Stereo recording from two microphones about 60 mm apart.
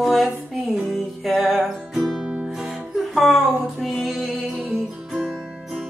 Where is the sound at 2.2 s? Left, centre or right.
Centre.